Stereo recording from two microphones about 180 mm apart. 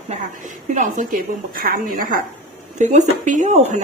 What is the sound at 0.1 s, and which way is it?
A woman's voice, 45° right (ahead or behind).